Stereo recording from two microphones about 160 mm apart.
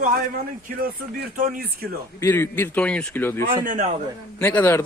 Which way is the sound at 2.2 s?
15° left (ahead or behind).